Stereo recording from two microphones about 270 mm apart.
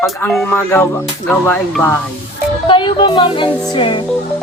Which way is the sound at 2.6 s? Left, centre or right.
Centre.